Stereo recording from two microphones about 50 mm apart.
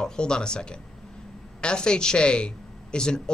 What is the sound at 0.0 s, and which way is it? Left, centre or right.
A woman's voice, centre.